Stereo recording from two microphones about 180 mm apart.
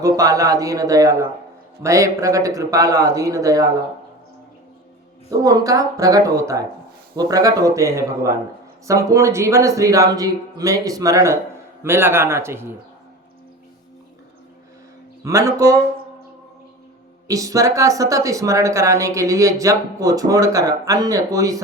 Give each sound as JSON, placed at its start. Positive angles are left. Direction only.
{"t": 0.0, "sound": "a woman's voice", "side_deg": -20}
{"t": 5.4, "sound": "a woman's voice", "side_deg": -20}
{"t": 15.2, "sound": "speech", "side_deg": -15}
{"t": 17.2, "sound": "a woman's voice", "side_deg": -20}